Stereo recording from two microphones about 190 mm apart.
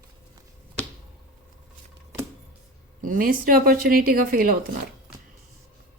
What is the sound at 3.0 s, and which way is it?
A woman's voice, 50° right (ahead or behind).